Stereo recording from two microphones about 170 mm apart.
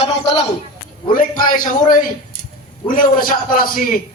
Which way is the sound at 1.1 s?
55° left (ahead or behind).